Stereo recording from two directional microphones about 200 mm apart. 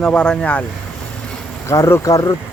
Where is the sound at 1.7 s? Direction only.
15° left (ahead or behind).